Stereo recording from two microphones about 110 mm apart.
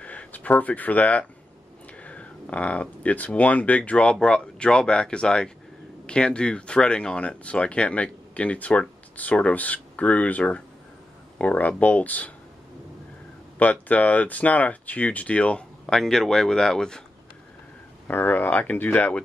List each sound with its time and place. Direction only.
0.0 s speech: 10° left (ahead or behind)
13.6 s speech: 15° left (ahead or behind)
18.0 s speech: 15° left (ahead or behind)